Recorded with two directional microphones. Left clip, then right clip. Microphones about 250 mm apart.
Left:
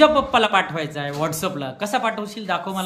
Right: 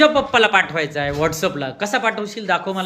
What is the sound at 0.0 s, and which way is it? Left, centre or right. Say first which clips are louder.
A child's voice: right 1 dB; centre.